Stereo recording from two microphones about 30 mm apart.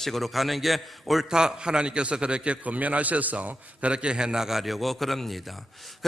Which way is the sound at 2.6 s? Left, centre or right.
Right.